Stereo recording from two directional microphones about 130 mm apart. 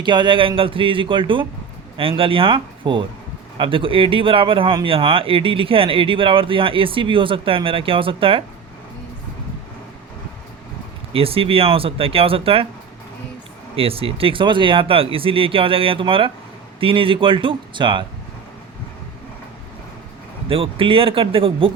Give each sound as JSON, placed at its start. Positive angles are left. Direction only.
{"t": 0.0, "sound": "a man's voice", "side_deg": -35}
{"t": 11.1, "sound": "speech", "side_deg": -45}
{"t": 13.7, "sound": "a man's voice", "side_deg": -45}
{"t": 20.5, "sound": "speech", "side_deg": -45}